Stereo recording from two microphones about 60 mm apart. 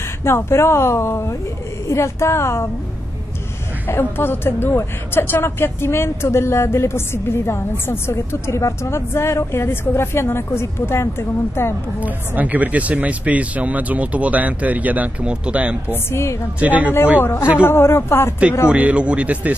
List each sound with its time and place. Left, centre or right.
0.2 s a woman's voice: left
3.9 s a woman's voice: left
12.0 s speech: right
15.9 s a woman's voice: left
16.5 s speech: right
17.2 s a woman's voice: left
18.7 s speech: right